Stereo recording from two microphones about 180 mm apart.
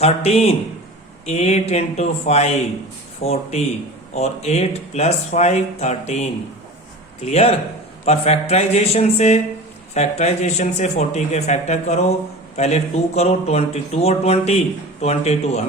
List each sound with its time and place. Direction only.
0.0 s speech: 35° left (ahead or behind)